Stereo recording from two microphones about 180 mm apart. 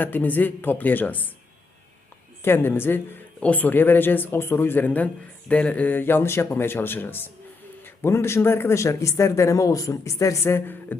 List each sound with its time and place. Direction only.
0.0 s speech: 10° left (ahead or behind)
2.4 s speech: 10° left (ahead or behind)